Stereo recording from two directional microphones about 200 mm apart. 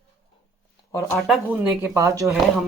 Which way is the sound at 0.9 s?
15° left (ahead or behind).